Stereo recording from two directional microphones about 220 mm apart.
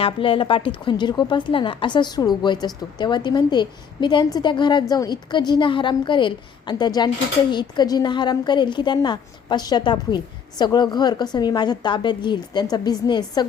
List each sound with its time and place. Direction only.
0.0 s a woman's voice: 25° left (ahead or behind)